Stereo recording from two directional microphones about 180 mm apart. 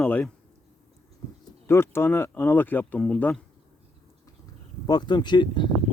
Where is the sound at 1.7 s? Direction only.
15° left (ahead or behind).